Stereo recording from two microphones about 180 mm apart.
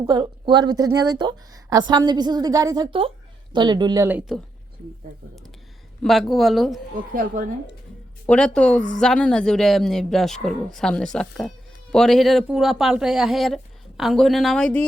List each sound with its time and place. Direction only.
0.0 s speech: 25° right (ahead or behind)
6.0 s a man's voice: centre (ahead or behind)
6.9 s speech: 50° right (ahead or behind)
8.3 s a man's voice: 5° left (ahead or behind)